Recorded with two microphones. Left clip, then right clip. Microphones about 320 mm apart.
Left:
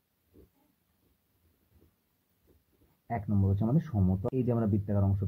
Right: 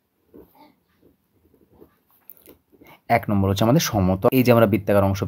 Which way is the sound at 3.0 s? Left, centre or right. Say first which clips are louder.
Right 15 dB; right.